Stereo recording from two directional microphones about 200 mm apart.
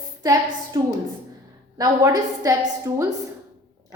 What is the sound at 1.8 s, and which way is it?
A woman's voice, 15° right (ahead or behind).